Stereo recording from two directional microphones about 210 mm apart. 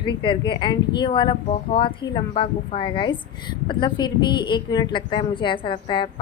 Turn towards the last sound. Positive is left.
turn(degrees=25)  # may be behind; listen again after turning